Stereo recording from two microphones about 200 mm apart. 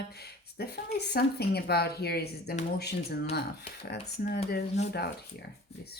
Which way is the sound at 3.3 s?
55° left (ahead or behind).